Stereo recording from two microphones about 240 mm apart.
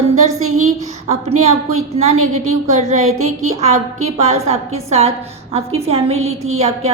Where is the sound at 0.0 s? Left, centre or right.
Right.